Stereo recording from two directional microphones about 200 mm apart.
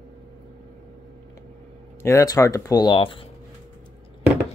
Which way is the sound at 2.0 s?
15° left (ahead or behind).